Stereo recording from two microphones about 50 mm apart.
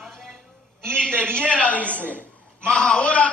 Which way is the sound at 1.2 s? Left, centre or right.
Right.